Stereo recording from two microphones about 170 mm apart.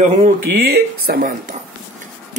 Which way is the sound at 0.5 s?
65° right (ahead or behind).